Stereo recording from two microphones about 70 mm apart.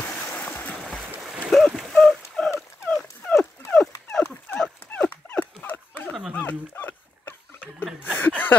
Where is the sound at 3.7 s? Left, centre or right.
Centre.